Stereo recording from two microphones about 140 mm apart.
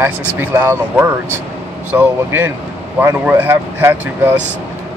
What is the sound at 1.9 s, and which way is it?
Speech, 15° right (ahead or behind).